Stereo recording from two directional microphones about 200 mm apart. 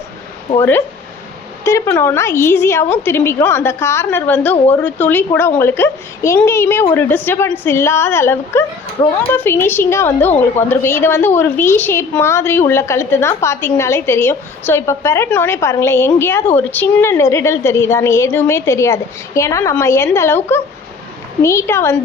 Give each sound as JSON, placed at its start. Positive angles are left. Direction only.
{"t": 1.6, "sound": "a woman's voice", "side_deg": 15}